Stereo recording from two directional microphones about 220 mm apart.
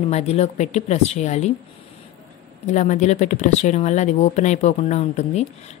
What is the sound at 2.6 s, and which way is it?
Speech, 35° left (ahead or behind).